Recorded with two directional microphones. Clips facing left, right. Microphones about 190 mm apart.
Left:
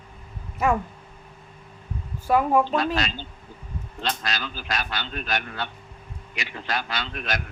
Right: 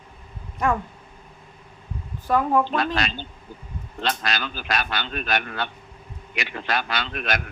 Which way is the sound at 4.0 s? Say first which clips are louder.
Right 3 dB; 65° right (ahead or behind).